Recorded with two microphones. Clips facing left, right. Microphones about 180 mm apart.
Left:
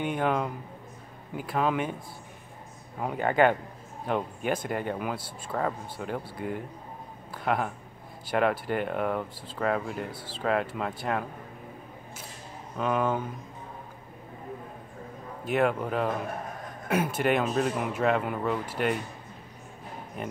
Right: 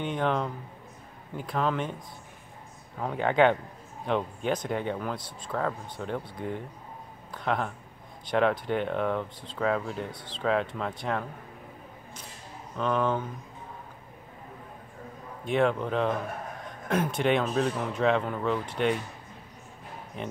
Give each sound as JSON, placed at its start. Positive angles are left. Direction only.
{"t": 0.0, "sound": "speech", "side_deg": 10}
{"t": 3.0, "sound": "speech", "side_deg": 10}
{"t": 12.7, "sound": "speech", "side_deg": 10}
{"t": 15.4, "sound": "speech", "side_deg": 5}